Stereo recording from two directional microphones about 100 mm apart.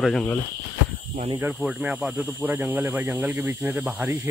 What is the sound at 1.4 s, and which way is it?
Cricket, 15° right (ahead or behind).